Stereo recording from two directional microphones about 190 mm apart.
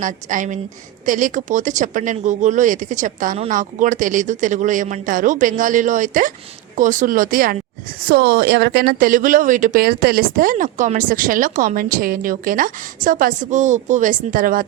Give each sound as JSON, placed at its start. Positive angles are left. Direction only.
{"t": 0.0, "sound": "a woman's voice", "side_deg": -40}